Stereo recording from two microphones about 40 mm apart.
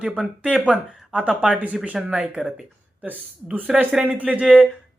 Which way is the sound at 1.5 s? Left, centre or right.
Right.